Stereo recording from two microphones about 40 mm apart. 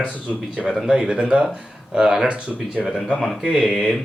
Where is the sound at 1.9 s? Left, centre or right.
Centre.